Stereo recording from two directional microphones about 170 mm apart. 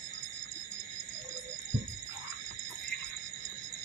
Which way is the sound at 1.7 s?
50° right (ahead or behind).